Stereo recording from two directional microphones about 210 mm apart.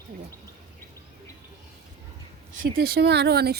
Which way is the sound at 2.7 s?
50° right (ahead or behind).